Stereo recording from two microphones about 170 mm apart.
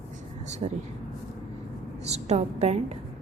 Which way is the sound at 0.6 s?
45° right (ahead or behind).